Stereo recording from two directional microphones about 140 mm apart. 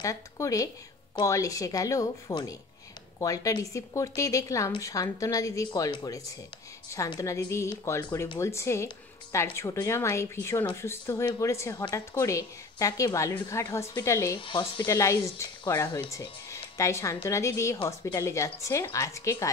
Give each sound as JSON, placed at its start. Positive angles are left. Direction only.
{"t": 0.0, "sound": "a woman's voice", "side_deg": 25}
{"t": 14.4, "sound": "speech", "side_deg": 35}
{"t": 14.9, "sound": "a woman's voice", "side_deg": 20}